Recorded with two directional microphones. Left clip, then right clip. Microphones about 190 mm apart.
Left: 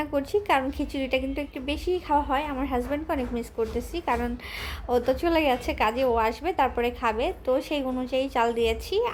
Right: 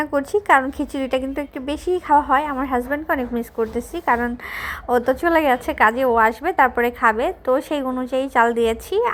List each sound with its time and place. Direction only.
0.0 s a woman's voice: 25° right (ahead or behind)